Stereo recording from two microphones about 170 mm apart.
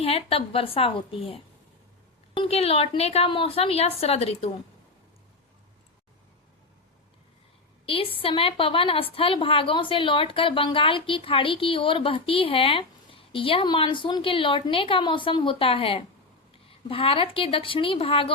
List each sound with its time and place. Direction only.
0.0 s a woman's voice: 35° left (ahead or behind)
7.9 s a woman's voice: 30° left (ahead or behind)